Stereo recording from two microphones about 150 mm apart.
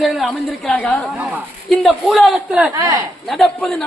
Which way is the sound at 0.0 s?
Centre (ahead or behind).